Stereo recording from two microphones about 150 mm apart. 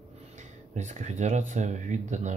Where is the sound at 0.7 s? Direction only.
50° right (ahead or behind).